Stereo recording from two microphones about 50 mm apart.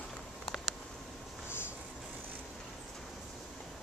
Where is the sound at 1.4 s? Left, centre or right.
Left.